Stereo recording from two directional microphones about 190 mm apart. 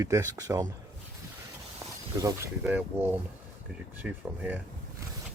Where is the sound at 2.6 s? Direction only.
10° right (ahead or behind).